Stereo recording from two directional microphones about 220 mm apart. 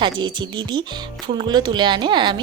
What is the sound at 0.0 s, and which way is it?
A woman's voice, 20° right (ahead or behind).